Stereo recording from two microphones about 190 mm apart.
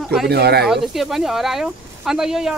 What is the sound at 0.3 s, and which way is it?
Speech, 60° right (ahead or behind).